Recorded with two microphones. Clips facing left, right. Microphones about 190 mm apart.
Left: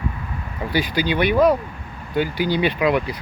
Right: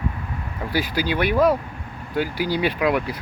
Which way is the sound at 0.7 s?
5° right (ahead or behind).